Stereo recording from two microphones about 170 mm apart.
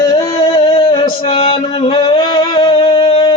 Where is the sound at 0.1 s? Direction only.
35° left (ahead or behind).